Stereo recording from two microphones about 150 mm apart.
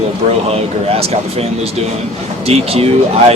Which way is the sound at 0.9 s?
40° right (ahead or behind).